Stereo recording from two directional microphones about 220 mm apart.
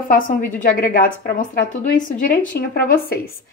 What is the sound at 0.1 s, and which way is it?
Speech, 40° left (ahead or behind).